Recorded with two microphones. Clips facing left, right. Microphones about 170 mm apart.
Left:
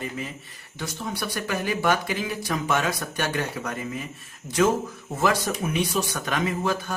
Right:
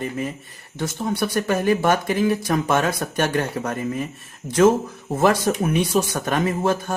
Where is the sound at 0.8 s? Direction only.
45° right (ahead or behind).